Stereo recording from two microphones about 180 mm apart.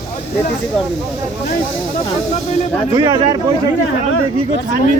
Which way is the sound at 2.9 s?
25° right (ahead or behind).